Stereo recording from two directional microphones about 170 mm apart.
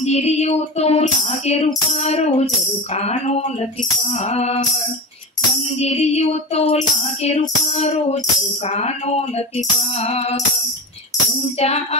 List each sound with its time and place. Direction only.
0.0 s music: 40° left (ahead or behind)
5.8 s music: 40° left (ahead or behind)
11.6 s music: 40° left (ahead or behind)